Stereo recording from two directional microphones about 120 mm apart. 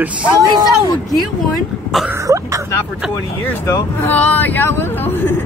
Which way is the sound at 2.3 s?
25° right (ahead or behind).